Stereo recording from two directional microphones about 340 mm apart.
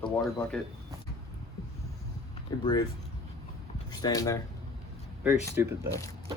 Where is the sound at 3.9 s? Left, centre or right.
Centre.